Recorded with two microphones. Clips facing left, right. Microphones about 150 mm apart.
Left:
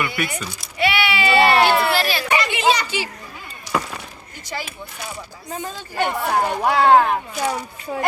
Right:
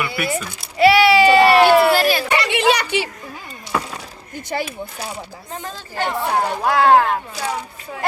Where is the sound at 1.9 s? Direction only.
45° right (ahead or behind).